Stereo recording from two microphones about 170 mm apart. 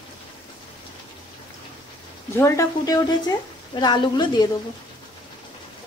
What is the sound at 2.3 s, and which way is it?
A woman's voice, 15° left (ahead or behind).